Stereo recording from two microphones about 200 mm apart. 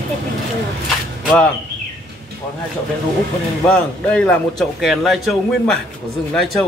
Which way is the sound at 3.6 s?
5° left (ahead or behind).